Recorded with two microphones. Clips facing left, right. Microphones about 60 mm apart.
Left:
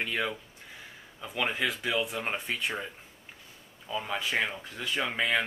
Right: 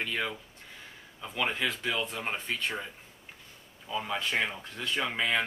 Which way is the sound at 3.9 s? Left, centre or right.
Centre.